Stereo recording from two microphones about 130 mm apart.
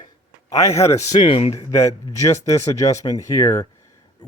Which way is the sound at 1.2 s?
50° left (ahead or behind).